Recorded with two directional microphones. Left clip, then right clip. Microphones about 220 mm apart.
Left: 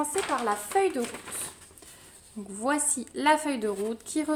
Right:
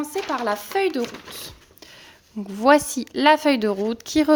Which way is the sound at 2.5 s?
40° right (ahead or behind).